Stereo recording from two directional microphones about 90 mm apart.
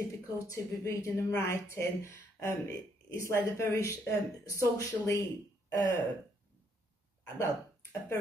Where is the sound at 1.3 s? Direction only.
30° left (ahead or behind).